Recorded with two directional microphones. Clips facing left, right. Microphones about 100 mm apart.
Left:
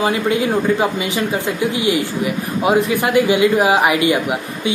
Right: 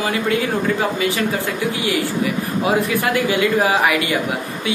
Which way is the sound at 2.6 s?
20° left (ahead or behind).